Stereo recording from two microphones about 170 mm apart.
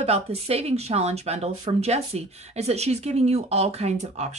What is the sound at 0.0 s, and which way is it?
Speech, 35° right (ahead or behind).